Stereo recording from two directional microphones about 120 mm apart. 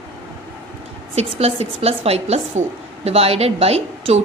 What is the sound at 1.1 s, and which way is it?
A woman's voice, 60° right (ahead or behind).